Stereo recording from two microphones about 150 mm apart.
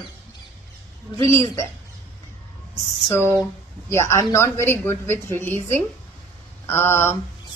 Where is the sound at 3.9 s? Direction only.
20° left (ahead or behind).